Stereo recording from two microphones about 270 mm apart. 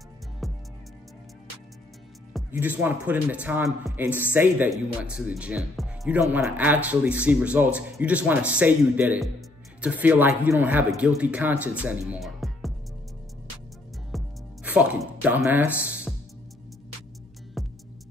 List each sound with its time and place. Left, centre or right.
0.4 s music: centre
2.5 s a man's voice: centre
5.8 s music: centre
6.3 s a man's voice: centre
12.1 s music: centre
14.1 s music: centre
17.6 s music: centre